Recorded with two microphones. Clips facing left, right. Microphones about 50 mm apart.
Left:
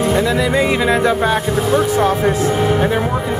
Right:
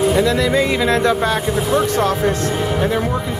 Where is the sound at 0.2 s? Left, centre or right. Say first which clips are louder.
Even; centre.